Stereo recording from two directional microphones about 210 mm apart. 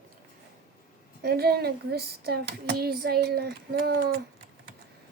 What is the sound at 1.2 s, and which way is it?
Speech, 50° right (ahead or behind).